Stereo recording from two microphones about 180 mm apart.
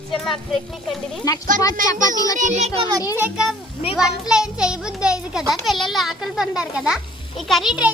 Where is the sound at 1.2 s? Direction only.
20° left (ahead or behind).